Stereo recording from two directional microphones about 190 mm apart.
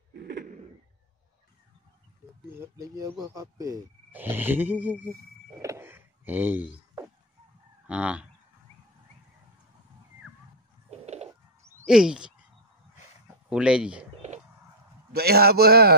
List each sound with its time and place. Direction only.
0.1 s a sound: 55° right (ahead or behind)
3.0 s speech: 15° right (ahead or behind)
10.9 s chicken: 35° right (ahead or behind)
11.8 s a sound: 5° right (ahead or behind)
13.5 s speech: 5° right (ahead or behind)
15.1 s a man's voice: 55° right (ahead or behind)